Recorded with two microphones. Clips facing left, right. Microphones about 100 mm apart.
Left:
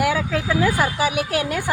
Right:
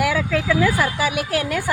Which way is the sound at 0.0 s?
25° left (ahead or behind).